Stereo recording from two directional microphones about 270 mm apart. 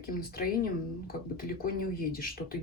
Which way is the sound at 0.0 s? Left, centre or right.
Left.